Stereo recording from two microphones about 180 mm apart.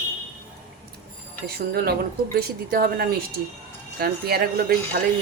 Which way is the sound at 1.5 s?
60° right (ahead or behind).